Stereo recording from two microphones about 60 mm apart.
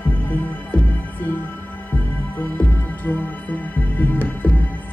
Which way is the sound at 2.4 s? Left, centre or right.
Left.